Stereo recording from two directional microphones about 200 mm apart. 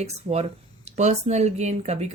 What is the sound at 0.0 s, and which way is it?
A woman's voice, 35° right (ahead or behind).